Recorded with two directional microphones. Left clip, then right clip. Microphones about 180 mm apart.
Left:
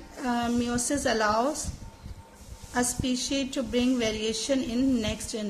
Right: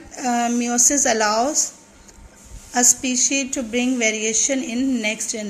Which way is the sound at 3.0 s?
40° right (ahead or behind).